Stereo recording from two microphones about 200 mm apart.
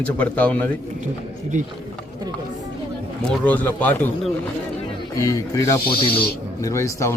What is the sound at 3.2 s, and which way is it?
Speech, 10° left (ahead or behind).